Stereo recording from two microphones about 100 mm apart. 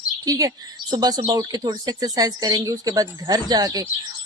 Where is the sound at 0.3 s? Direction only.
35° right (ahead or behind).